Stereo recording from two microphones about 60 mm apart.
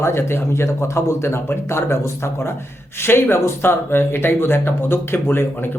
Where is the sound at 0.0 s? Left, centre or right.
Left.